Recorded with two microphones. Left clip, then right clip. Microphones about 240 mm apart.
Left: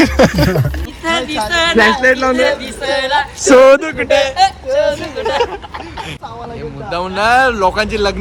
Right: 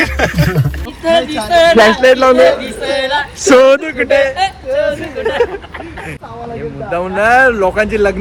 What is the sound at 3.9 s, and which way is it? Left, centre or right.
Speech, centre.